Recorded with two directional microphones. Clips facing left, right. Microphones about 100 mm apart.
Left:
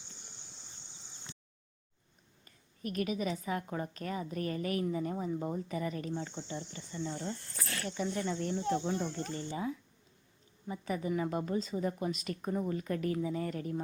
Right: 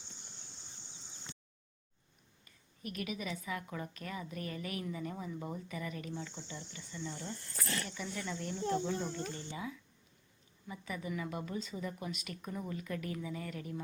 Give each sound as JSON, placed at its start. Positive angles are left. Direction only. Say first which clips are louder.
{"t": 2.4, "sound": "a woman's voice", "louder": "left 5 dB", "side_deg": 40}